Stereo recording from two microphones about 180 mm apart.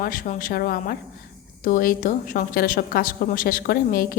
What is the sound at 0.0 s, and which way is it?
A woman's voice, 50° left (ahead or behind).